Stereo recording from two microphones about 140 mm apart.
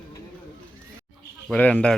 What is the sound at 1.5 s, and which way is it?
Speech, 10° left (ahead or behind).